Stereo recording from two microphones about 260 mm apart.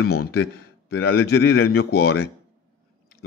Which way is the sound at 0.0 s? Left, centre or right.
Left.